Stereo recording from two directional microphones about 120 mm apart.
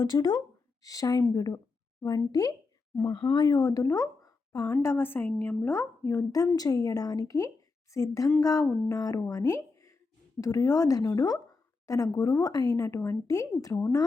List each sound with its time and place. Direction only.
0.0 s a woman's voice: 35° left (ahead or behind)